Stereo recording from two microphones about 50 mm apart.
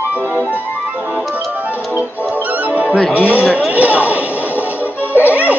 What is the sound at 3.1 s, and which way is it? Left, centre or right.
Speech, right.